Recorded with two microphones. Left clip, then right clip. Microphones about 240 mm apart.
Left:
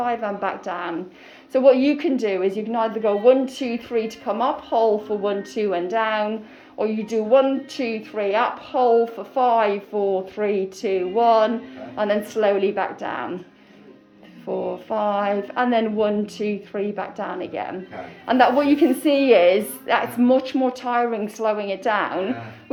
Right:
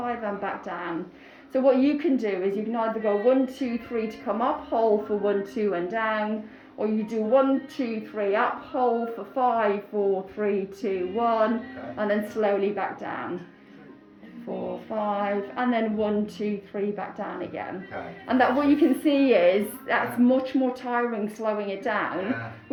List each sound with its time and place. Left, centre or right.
0.0 s a woman's voice: centre
14.4 s a woman's voice: centre